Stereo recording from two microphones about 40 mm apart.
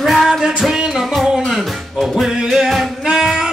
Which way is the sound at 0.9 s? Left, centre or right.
Centre.